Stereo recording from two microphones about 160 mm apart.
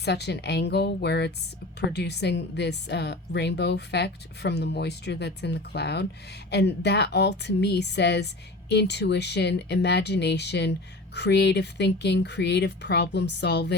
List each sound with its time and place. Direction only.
0.0 s speech: 90° left